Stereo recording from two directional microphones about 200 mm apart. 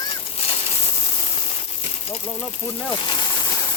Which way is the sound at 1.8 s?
30° left (ahead or behind).